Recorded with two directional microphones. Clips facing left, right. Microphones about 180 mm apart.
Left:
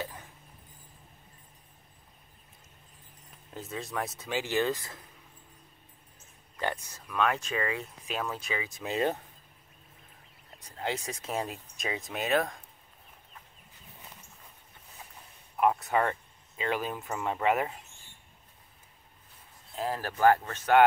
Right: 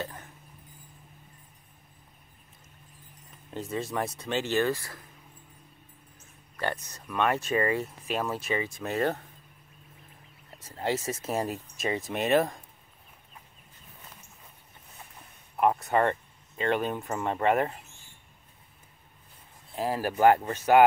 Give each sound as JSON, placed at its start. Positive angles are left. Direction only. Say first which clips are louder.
{"t": 3.5, "sound": "speech", "louder": "right 4 dB", "side_deg": 0}
{"t": 6.6, "sound": "speech", "louder": "right 1 dB", "side_deg": 10}
{"t": 7.1, "sound": "speech", "louder": "right 2 dB", "side_deg": -5}
{"t": 8.8, "sound": "speech", "louder": "even", "side_deg": 15}
{"t": 10.9, "sound": "speech", "louder": "right 5 dB", "side_deg": -5}
{"t": 15.5, "sound": "speech", "louder": "right 2 dB", "side_deg": 0}
{"t": 19.7, "sound": "speech", "louder": "right 4 dB", "side_deg": -5}